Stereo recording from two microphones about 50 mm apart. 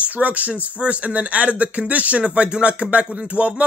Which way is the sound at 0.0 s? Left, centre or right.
Right.